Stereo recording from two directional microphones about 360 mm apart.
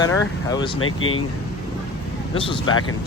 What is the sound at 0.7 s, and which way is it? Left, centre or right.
Speech, left.